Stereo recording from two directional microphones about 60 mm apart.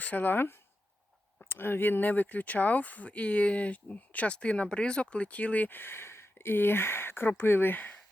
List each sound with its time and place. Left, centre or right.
0.0 s speech: left